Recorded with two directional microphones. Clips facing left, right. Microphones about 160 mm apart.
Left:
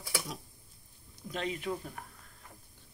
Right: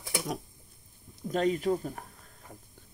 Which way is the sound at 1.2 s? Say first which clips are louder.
Right 9 dB; 40° right (ahead or behind).